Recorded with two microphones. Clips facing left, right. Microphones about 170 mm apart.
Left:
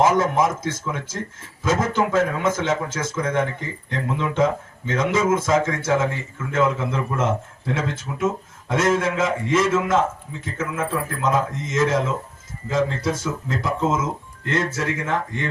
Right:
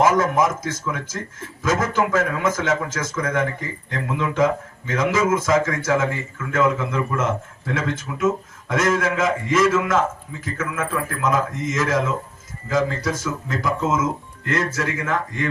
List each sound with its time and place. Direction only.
0.0 s speech: 30° left (ahead or behind)
4.9 s speech: 30° left (ahead or behind)